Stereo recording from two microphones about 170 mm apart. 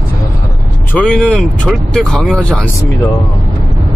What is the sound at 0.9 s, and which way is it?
Speech, 5° left (ahead or behind).